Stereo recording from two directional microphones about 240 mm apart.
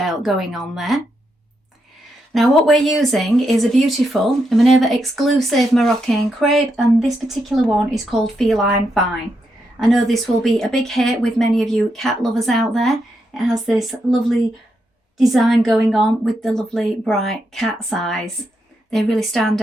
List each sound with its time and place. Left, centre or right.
0.0 s speech: centre
2.3 s speech: centre